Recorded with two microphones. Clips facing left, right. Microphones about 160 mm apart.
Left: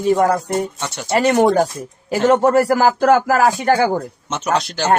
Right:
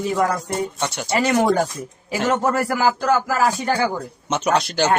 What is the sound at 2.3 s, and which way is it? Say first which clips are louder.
Speech: left 7 dB; 30° left (ahead or behind).